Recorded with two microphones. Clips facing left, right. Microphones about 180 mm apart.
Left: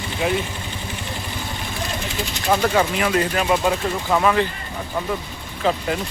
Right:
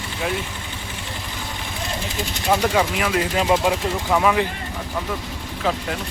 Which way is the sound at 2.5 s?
5° right (ahead or behind).